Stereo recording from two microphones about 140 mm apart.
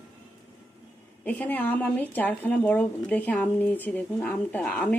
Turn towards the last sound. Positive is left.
turn(degrees=10)  # may be behind; listen again after turning